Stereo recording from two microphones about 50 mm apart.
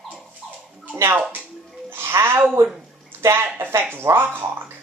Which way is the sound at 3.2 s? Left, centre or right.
Right.